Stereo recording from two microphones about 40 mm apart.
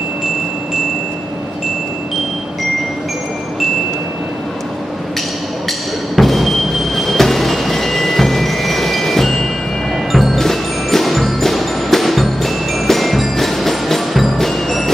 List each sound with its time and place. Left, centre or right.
5.7 s music: centre
10.1 s tubular bells: centre